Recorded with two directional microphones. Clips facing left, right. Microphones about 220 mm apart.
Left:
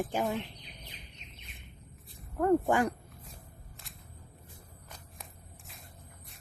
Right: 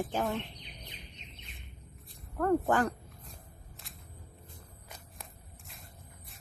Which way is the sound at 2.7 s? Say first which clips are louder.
Left 1 dB; 10° left (ahead or behind).